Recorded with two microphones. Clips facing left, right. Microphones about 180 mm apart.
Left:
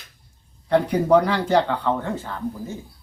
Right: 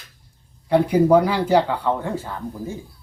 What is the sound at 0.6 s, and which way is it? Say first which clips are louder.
Speech: right 3 dB; 10° right (ahead or behind).